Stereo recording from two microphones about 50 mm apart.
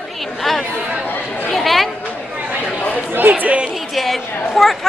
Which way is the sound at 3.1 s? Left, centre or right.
Right.